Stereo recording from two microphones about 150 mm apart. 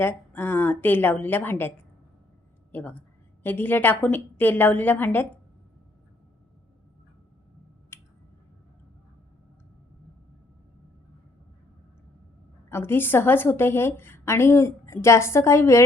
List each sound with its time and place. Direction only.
0.0 s a woman's voice: 10° left (ahead or behind)
2.7 s a woman's voice: 10° left (ahead or behind)
7.9 s a sound: 15° left (ahead or behind)
12.7 s a woman's voice: 15° left (ahead or behind)